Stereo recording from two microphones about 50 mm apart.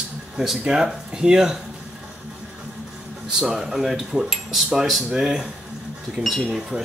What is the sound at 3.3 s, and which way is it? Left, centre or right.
Speech, centre.